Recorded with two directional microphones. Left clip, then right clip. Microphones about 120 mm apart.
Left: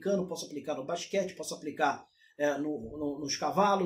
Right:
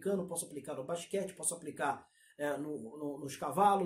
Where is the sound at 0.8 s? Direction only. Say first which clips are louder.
Left 5 dB; 15° left (ahead or behind).